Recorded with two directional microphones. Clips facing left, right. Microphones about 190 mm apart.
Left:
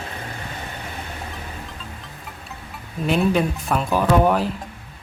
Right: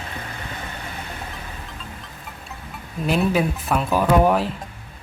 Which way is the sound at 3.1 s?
Centre (ahead or behind).